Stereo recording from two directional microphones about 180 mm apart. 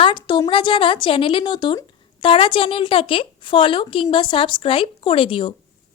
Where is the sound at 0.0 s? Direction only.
25° left (ahead or behind).